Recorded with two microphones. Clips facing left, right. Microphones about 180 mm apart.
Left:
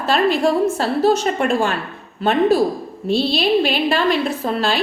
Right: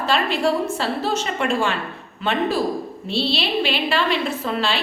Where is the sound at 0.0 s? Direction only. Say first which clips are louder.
Left 4 dB; 40° left (ahead or behind).